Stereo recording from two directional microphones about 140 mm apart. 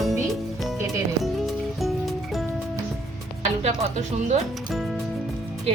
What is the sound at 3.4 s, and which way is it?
Music, 50° right (ahead or behind).